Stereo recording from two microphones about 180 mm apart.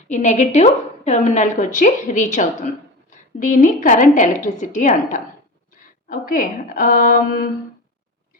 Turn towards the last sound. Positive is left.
turn(degrees=55)  # may be behind; listen again after turning